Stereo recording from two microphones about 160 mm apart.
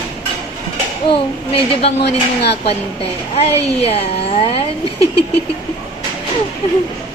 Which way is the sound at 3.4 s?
40° left (ahead or behind).